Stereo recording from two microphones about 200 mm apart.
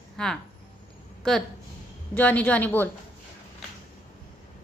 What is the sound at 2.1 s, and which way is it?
Speech, 5° left (ahead or behind).